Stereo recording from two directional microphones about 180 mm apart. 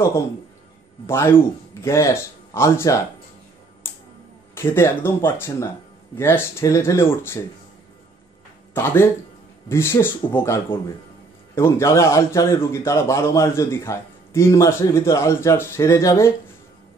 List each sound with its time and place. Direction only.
1.0 s a man's voice: 15° left (ahead or behind)
4.6 s a man's voice: 15° left (ahead or behind)
8.7 s a man's voice: 10° left (ahead or behind)